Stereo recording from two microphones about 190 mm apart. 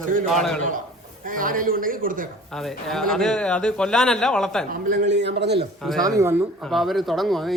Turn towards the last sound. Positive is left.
turn(degrees=0)  # may be behind; listen again after turning